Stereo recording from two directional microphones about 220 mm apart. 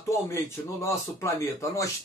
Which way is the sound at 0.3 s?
10° left (ahead or behind).